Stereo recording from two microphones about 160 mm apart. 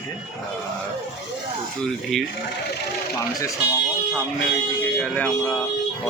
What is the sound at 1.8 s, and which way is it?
Speech, 5° left (ahead or behind).